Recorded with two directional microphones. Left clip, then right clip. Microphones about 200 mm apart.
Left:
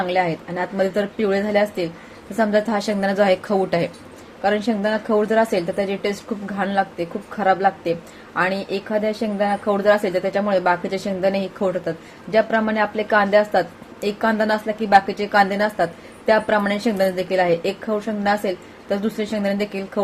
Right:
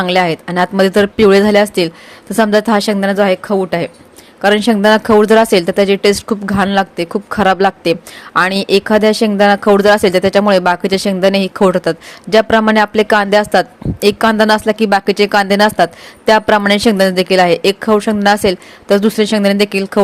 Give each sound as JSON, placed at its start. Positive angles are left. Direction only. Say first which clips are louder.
{"t": 0.0, "sound": "a woman's voice", "louder": "right 8 dB", "side_deg": -45}